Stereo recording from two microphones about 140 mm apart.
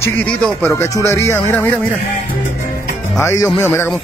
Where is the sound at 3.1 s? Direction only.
20° left (ahead or behind).